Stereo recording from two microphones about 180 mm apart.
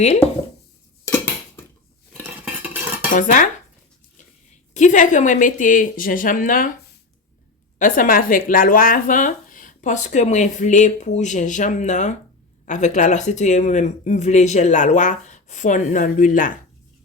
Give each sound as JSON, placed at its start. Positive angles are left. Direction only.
{"t": 1.0, "sound": "dishes", "side_deg": 15}
{"t": 2.1, "sound": "cutlery", "side_deg": -10}
{"t": 3.2, "sound": "speech", "side_deg": 45}
{"t": 4.7, "sound": "speech", "side_deg": 45}
{"t": 7.8, "sound": "speech", "side_deg": 50}